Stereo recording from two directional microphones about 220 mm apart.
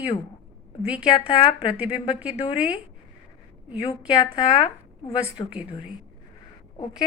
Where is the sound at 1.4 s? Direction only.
20° left (ahead or behind).